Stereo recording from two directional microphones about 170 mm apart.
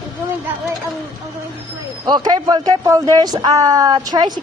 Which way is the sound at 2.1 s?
25° right (ahead or behind).